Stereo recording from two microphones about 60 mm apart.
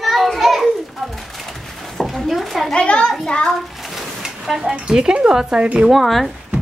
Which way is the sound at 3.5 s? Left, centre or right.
Centre.